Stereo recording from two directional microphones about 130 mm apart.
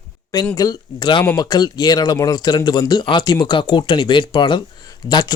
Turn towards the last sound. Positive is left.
turn(degrees=30)  # may be behind; listen again after turning